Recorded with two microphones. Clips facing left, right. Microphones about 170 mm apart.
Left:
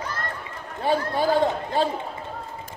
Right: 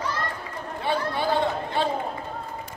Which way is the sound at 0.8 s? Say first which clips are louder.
Left 4 dB; 40° left (ahead or behind).